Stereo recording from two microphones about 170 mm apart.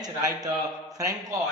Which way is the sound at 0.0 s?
20° right (ahead or behind).